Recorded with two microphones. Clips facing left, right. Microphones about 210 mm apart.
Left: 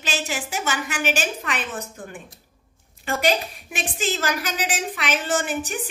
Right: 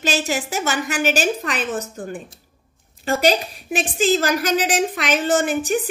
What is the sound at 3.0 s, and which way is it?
A woman's voice, 35° right (ahead or behind).